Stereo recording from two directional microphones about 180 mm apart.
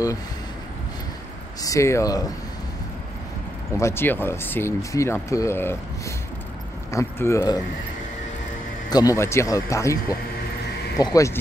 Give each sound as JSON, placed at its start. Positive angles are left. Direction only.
{"t": 1.6, "sound": "speech", "side_deg": 15}
{"t": 3.7, "sound": "speech", "side_deg": 15}
{"t": 8.9, "sound": "speech", "side_deg": 15}
{"t": 11.0, "sound": "speech", "side_deg": 20}